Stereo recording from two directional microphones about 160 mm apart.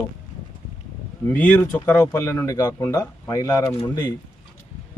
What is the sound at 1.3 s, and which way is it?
Speech, 10° left (ahead or behind).